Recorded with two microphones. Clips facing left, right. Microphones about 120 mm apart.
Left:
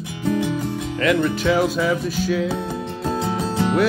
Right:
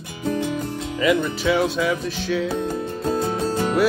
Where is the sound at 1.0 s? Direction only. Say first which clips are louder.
Left 1 dB; 5° right (ahead or behind).